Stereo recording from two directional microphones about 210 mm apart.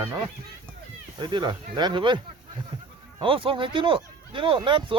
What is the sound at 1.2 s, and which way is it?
Speech, 20° right (ahead or behind).